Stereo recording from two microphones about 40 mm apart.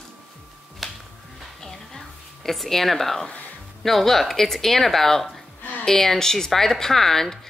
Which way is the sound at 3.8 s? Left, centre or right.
Centre.